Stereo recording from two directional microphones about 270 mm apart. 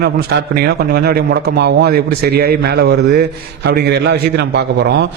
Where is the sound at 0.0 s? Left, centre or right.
Right.